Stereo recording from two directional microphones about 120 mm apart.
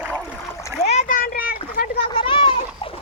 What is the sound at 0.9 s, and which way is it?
Splash, 80° left.